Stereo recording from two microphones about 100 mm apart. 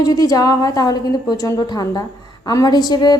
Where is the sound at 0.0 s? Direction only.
35° left (ahead or behind).